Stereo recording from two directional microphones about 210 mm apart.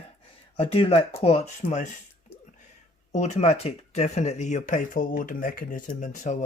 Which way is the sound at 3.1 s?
35° left (ahead or behind).